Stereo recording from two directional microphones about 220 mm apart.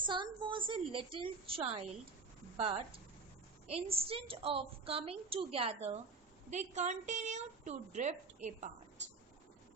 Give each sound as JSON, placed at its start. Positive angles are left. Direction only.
{"t": 0.0, "sound": "a woman's voice", "side_deg": -20}